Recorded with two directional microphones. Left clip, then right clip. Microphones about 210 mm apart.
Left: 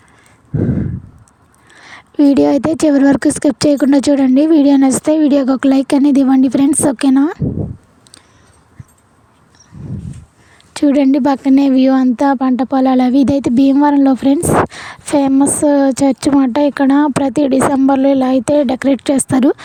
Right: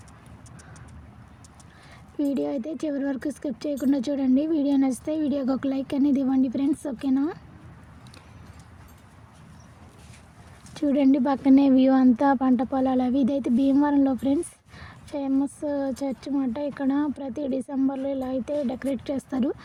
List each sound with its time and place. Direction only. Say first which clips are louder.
1.9 s speech: left 16 dB; 55° left (ahead or behind)
10.8 s speech: left 10 dB; 45° left (ahead or behind)